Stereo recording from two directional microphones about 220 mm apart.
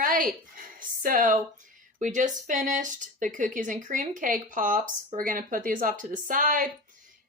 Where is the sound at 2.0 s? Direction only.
35° right (ahead or behind).